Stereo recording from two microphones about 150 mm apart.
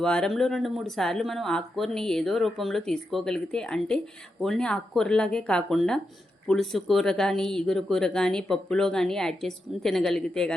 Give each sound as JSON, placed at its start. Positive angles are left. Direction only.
{"t": 0.0, "sound": "speech", "side_deg": 5}